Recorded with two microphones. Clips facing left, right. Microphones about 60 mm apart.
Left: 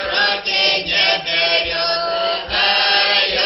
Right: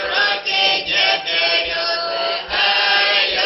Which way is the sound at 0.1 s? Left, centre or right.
Centre.